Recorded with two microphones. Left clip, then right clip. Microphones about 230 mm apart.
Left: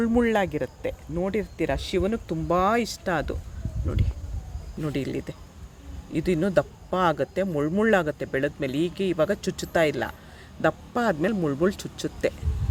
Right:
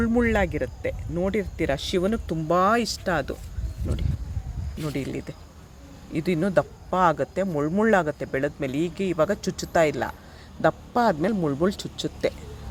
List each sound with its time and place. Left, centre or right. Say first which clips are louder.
0.0 s speech: even; centre
4.8 s speech: left 1 dB; centre